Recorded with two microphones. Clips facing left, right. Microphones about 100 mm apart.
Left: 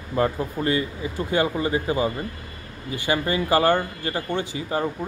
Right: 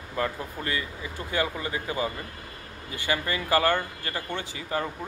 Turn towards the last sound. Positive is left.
turn(degrees=20)  # may be behind; listen again after turning